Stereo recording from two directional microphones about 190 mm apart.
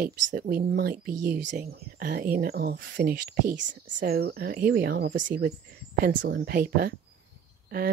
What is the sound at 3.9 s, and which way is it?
Speech, 55° right (ahead or behind).